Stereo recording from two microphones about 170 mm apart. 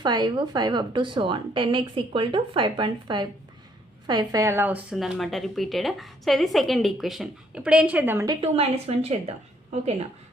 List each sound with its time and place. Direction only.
0.0 s a woman's voice: 25° right (ahead or behind)
8.4 s a woman's voice: 35° right (ahead or behind)